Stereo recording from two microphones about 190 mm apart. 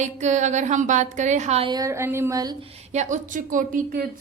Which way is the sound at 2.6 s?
35° right (ahead or behind).